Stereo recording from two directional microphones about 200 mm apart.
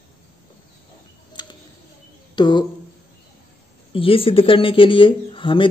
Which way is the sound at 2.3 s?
20° left (ahead or behind).